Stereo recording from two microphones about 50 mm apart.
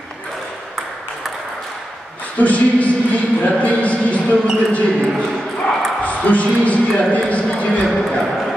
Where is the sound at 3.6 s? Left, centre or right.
Left.